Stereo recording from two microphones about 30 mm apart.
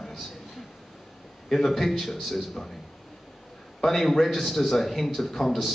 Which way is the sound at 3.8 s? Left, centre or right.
Centre.